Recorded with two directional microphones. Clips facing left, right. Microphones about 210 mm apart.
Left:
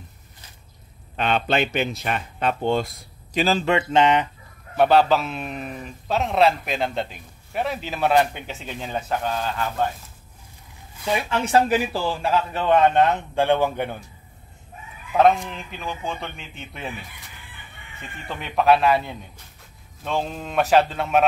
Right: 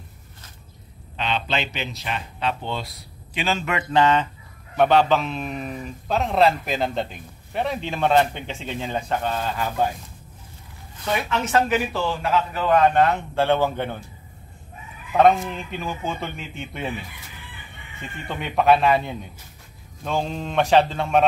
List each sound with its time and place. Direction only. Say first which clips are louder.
1.1 s speech: left 4 dB; 50° left (ahead or behind); by 4.3 s 20° left (ahead or behind)
4.7 s a man's voice: left 1 dB; 5° left (ahead or behind)
11.2 s a man's voice: left 3 dB; 30° left (ahead or behind); by 13.9 s 15° left (ahead or behind)
15.1 s a man's voice: right 1 dB; centre (ahead or behind)
18.3 s a man's voice: even; centre (ahead or behind)